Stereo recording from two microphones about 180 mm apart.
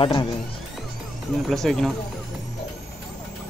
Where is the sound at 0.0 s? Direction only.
25° left (ahead or behind).